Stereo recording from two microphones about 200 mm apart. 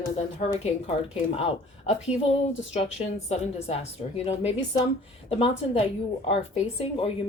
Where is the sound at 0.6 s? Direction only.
30° left (ahead or behind).